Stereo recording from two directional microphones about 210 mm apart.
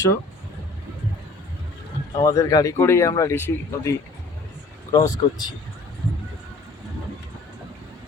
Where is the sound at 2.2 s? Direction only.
15° left (ahead or behind).